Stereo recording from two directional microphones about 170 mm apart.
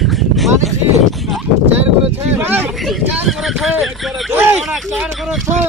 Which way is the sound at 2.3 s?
15° right (ahead or behind).